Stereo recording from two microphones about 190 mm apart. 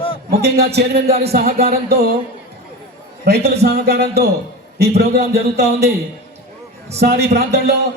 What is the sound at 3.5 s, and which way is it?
A man's voice, 60° right (ahead or behind).